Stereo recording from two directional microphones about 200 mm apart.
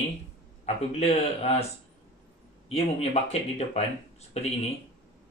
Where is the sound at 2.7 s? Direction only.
30° left (ahead or behind).